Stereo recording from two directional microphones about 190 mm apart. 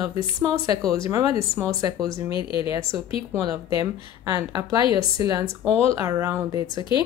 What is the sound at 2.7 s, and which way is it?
Speech, 15° right (ahead or behind).